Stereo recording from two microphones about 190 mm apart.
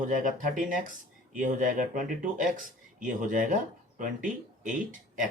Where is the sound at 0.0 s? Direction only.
45° right (ahead or behind).